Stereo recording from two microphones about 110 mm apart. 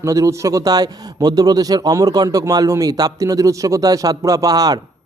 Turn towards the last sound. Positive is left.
turn(degrees=-35)  # may be behind; listen again after turning